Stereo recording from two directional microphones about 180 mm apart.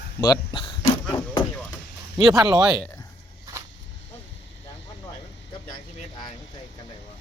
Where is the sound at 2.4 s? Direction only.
25° right (ahead or behind).